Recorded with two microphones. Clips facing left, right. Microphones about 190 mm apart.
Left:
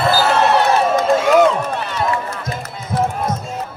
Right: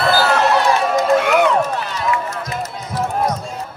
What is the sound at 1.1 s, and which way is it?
Crowd, 65° right (ahead or behind).